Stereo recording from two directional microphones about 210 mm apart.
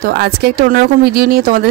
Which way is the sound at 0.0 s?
50° right (ahead or behind).